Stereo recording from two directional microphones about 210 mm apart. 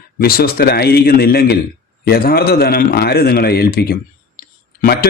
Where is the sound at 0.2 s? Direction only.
45° left (ahead or behind).